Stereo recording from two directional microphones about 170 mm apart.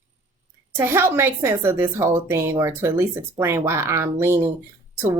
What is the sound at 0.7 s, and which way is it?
A woman's voice, 15° right (ahead or behind).